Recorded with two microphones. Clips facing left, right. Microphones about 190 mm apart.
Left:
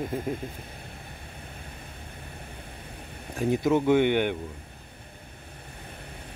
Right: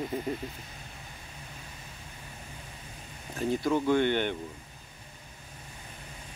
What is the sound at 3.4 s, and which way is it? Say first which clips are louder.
Speech: left 4 dB; 20° left (ahead or behind).